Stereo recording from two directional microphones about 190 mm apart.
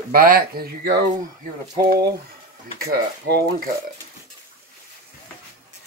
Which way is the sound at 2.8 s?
55° right (ahead or behind).